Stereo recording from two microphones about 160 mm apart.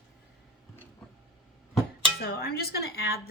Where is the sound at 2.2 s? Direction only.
70° left (ahead or behind).